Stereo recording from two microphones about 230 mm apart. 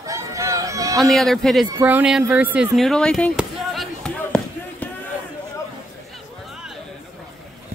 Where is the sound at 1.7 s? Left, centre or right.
Centre.